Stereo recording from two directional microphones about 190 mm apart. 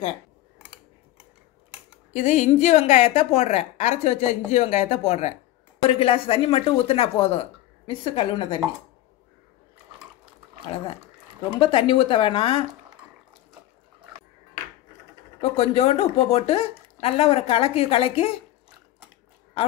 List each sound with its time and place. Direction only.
2.1 s a woman's voice: 40° left (ahead or behind)
11.5 s speech: 25° left (ahead or behind)
15.5 s a woman's voice: 30° left (ahead or behind)